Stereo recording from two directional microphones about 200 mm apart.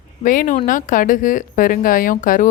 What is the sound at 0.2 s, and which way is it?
Speech, 40° left (ahead or behind).